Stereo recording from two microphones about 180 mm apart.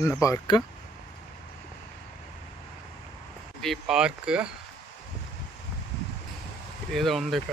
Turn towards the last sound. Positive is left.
turn(degrees=0)  # may be behind; listen again after turning